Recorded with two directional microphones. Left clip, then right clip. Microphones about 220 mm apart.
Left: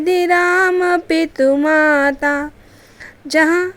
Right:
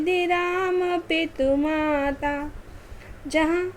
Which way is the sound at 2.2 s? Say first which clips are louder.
Left 10 dB; 15° left (ahead or behind).